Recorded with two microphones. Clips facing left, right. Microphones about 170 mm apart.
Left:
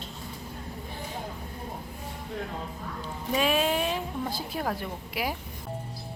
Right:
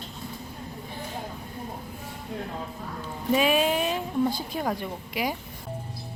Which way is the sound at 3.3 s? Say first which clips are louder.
Right 3 dB; 5° right (ahead or behind).